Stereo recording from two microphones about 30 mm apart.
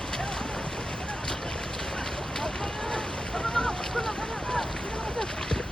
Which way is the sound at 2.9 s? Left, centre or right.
Centre.